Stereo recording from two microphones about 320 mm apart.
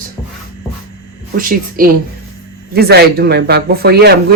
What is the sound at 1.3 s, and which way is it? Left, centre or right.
Speech, right.